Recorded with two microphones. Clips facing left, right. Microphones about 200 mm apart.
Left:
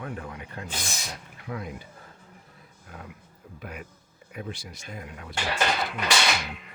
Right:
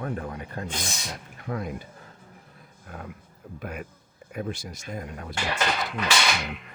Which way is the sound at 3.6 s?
50° right (ahead or behind).